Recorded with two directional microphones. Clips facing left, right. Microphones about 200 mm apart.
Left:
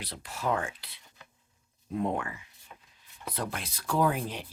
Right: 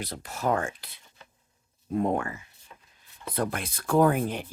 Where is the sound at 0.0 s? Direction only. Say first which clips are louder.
Right 4 dB; 45° right (ahead or behind).